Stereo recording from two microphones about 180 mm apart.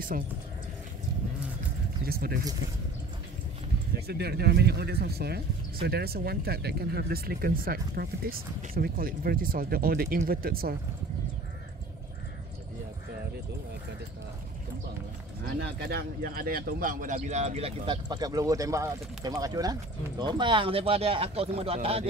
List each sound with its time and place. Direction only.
2.0 s speech: 55° right (ahead or behind)
4.1 s speech: 65° right (ahead or behind)
15.6 s a man's voice: 60° right (ahead or behind); by 22.0 s 35° right (ahead or behind)